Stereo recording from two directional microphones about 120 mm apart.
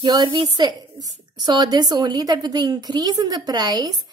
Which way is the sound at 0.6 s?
35° right (ahead or behind).